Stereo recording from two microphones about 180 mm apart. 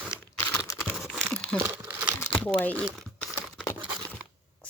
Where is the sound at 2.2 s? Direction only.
5° left (ahead or behind).